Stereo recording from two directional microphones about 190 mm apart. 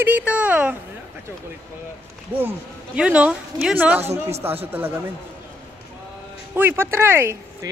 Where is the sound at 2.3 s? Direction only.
10° right (ahead or behind).